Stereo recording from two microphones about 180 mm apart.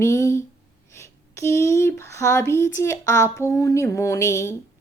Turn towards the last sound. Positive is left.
turn(degrees=15)  # may be behind; listen again after turning